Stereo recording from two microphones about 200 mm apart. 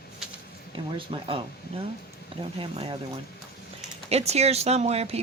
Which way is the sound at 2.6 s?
25° right (ahead or behind).